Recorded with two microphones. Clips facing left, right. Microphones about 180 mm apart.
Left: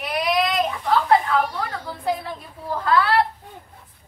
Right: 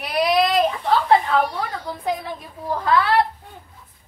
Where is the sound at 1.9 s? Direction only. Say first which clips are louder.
Left 1 dB; 15° right (ahead or behind).